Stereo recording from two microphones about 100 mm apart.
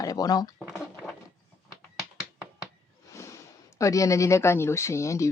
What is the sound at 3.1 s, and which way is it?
Speech, 30° left (ahead or behind).